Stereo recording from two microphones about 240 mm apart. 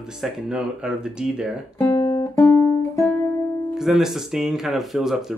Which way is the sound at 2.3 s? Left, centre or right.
Centre.